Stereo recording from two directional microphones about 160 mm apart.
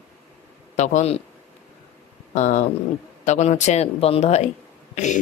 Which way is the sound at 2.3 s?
50° left (ahead or behind).